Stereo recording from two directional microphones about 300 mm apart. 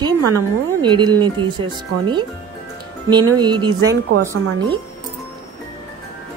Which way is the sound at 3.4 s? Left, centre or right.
Centre.